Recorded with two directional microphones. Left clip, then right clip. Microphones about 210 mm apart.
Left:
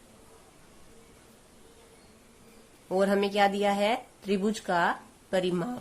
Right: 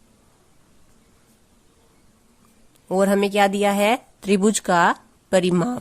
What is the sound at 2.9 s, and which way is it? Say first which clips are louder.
Speech: right 7 dB; 45° right (ahead or behind).